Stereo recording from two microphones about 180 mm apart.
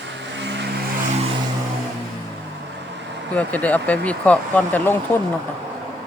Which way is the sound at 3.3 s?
10° left (ahead or behind).